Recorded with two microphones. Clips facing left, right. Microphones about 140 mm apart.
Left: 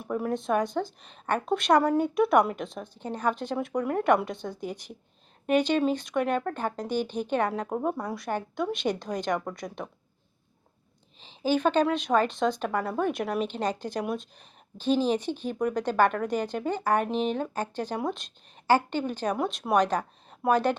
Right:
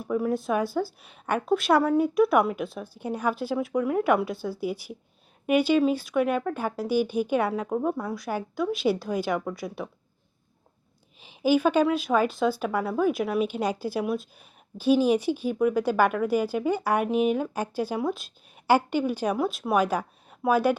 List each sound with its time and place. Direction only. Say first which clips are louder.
0.0 s a woman's voice: right 3 dB; centre (ahead or behind)
11.2 s speech: right 3 dB; 10° right (ahead or behind)